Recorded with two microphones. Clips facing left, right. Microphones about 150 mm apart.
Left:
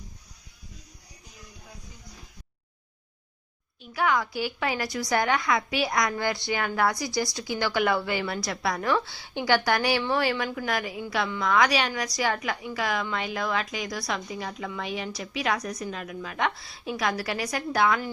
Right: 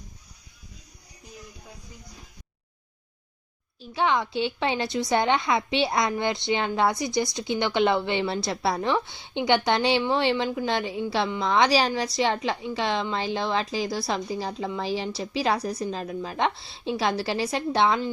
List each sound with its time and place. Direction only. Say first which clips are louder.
3.8 s a woman's voice: right 1 dB; 25° right (ahead or behind)